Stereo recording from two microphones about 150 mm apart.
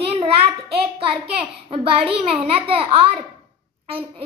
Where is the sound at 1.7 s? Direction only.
40° right (ahead or behind).